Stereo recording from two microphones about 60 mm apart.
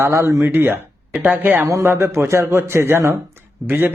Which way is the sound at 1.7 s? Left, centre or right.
Right.